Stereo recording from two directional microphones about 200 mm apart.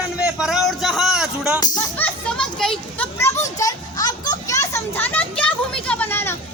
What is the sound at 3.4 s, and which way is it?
Children playing, 15° left (ahead or behind).